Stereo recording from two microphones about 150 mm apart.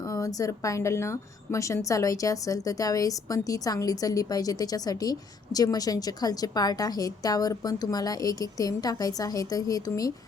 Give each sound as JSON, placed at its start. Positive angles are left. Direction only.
{"t": 0.1, "sound": "a woman's voice", "side_deg": 25}